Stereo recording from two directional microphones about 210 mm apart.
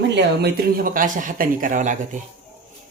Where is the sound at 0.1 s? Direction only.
55° right (ahead or behind); by 2.2 s 35° right (ahead or behind).